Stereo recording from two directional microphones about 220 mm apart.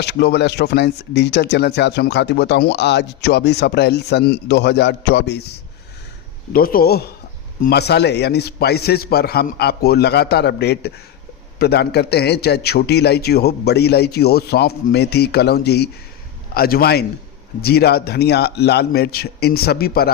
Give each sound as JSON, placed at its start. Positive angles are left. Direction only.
{"t": 0.0, "sound": "speech", "side_deg": 50}
{"t": 6.5, "sound": "speech", "side_deg": 40}